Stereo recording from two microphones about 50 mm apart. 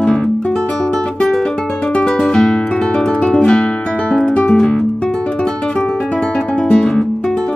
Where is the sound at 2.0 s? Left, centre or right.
Centre.